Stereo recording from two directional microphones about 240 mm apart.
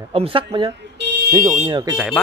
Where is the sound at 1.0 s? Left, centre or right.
Right.